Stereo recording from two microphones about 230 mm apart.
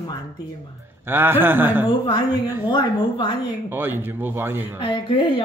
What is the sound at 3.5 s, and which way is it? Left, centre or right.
Speech, centre.